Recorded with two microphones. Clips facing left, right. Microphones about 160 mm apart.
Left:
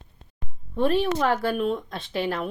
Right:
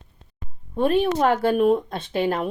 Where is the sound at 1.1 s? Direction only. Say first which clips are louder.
Right 4 dB; 25° right (ahead or behind).